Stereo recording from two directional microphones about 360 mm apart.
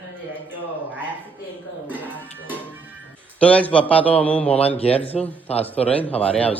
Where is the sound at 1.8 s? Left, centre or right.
Centre.